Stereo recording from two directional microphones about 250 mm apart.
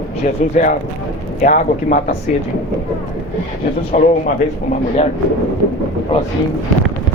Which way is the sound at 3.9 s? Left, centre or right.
Left.